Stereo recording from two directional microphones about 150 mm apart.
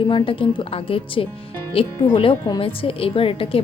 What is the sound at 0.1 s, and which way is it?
Speech, 35° left (ahead or behind).